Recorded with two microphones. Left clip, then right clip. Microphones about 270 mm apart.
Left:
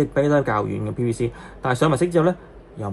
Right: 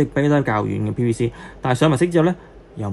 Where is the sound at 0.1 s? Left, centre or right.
Right.